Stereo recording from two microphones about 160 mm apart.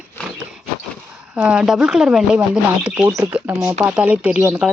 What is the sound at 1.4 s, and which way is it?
Speech, 5° right (ahead or behind).